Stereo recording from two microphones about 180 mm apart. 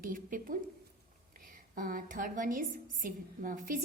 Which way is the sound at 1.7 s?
50° right (ahead or behind).